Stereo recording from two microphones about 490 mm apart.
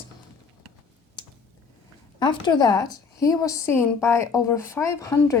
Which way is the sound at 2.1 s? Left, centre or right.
Centre.